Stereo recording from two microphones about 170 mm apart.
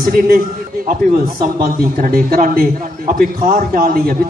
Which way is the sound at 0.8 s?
60° right (ahead or behind).